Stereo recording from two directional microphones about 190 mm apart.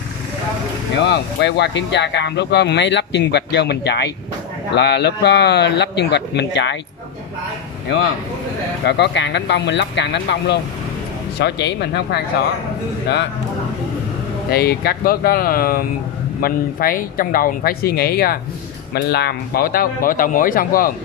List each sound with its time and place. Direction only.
0.9 s speech: 65° left (ahead or behind)
8.8 s speech: 60° left (ahead or behind)
14.5 s speech: 55° left (ahead or behind)